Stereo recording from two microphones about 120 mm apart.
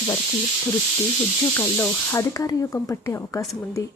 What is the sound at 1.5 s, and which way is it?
Speech, 20° left (ahead or behind).